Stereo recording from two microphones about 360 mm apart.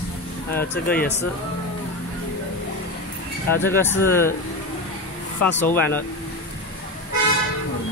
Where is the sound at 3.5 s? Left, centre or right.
Centre.